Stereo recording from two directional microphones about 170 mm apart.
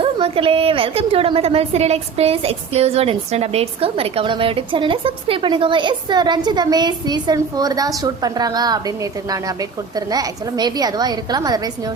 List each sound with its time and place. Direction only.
0.0 s a woman's voice: 30° right (ahead or behind)
9.9 s a woman's voice: 20° right (ahead or behind)